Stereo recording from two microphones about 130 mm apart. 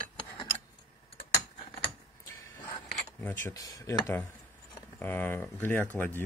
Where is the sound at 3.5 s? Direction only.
30° left (ahead or behind).